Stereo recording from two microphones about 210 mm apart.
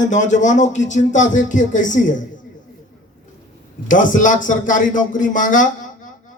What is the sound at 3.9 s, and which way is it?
A man's voice, 40° left (ahead or behind).